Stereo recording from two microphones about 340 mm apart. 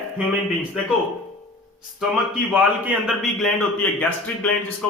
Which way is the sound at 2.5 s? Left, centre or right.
Centre.